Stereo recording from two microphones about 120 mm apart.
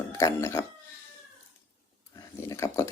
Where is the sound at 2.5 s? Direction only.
25° left (ahead or behind).